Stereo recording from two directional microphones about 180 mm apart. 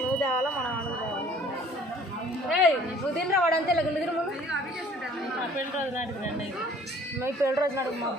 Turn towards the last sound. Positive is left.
turn(degrees=-15)  # may be behind; listen again after turning